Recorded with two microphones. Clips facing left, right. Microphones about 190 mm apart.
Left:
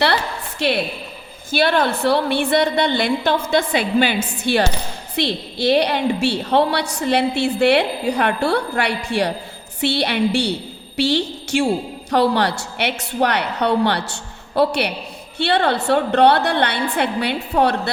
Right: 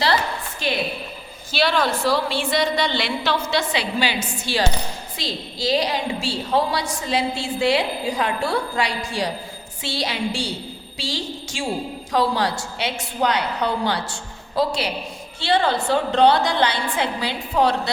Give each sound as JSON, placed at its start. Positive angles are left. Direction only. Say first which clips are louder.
{"t": 0.6, "sound": "a woman's voice", "louder": "left 6 dB", "side_deg": 70}
{"t": 1.5, "sound": "a woman's voice", "louder": "left 3 dB", "side_deg": 55}